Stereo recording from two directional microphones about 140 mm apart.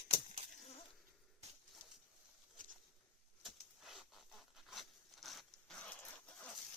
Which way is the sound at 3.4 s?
Centre (ahead or behind).